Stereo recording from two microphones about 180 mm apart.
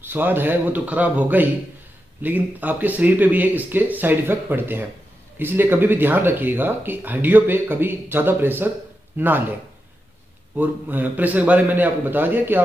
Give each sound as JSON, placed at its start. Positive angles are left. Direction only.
{"t": 0.0, "sound": "speech", "side_deg": -10}
{"t": 10.5, "sound": "speech", "side_deg": -10}